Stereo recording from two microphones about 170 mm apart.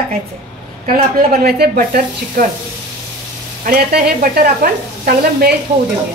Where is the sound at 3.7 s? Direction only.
60° right (ahead or behind).